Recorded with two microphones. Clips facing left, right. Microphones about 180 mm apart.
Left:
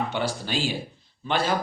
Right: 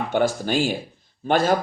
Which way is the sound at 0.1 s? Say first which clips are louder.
Right 7 dB; 50° right (ahead or behind).